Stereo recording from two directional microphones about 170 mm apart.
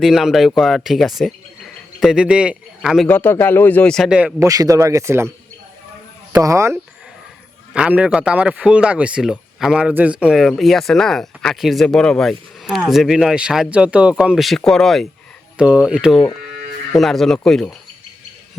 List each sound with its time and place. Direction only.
0.0 s a man's voice: centre (ahead or behind)
3.1 s speech: 10° left (ahead or behind); by 4.4 s 5° right (ahead or behind)
4.4 s speech: 20° right (ahead or behind)
6.3 s a man's voice: 20° right (ahead or behind); by 17.7 s centre (ahead or behind)